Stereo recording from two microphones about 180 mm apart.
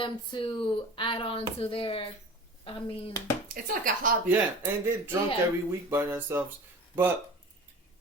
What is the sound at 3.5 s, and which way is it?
Speech, 50° right (ahead or behind).